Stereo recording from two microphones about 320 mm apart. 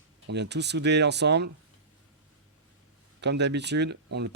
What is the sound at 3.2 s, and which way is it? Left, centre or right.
Speech, right.